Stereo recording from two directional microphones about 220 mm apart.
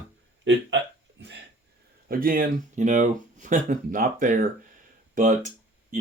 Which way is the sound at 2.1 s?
40° right (ahead or behind).